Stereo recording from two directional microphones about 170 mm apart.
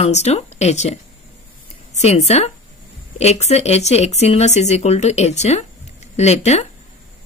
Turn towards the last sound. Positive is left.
turn(degrees=40)  # may be behind; listen again after turning